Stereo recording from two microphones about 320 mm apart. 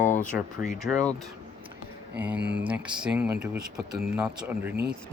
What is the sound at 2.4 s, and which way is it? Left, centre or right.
Speech, right.